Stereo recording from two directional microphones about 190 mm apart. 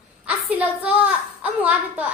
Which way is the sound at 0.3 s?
10° right (ahead or behind).